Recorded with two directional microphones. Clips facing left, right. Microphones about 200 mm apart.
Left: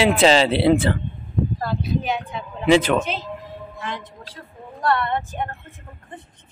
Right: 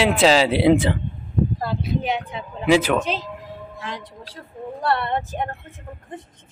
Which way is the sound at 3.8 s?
35° right (ahead or behind).